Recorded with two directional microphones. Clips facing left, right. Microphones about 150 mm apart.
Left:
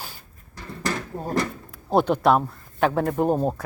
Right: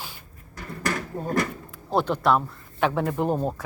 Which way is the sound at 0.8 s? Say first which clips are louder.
Even; 25° left (ahead or behind).